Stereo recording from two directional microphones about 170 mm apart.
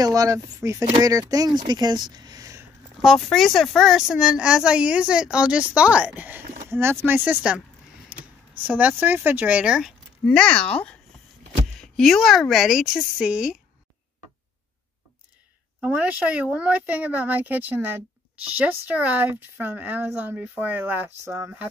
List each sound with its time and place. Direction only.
0.0 s speech: 20° right (ahead or behind)
3.0 s speech: centre (ahead or behind)
8.1 s a sound: 5° right (ahead or behind)
8.6 s speech: 10° right (ahead or behind)
15.8 s speech: 10° right (ahead or behind)